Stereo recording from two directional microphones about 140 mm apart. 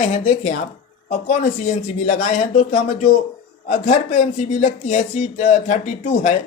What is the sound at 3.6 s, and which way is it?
Speech, 65° left (ahead or behind).